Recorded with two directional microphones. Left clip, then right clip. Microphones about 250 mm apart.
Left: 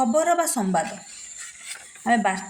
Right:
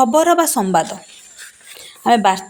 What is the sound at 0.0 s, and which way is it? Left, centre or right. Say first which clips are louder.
Speech: right 8 dB; right.